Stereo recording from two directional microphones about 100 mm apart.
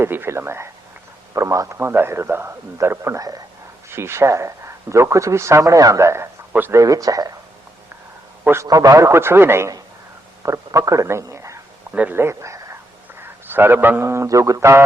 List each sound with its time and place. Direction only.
0.0 s speech: 25° right (ahead or behind)
6.7 s speech: 35° right (ahead or behind)
8.6 s speech: 35° right (ahead or behind)
11.9 s speech: 15° right (ahead or behind)